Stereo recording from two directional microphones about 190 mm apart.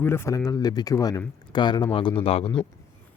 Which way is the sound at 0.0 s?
15° left (ahead or behind).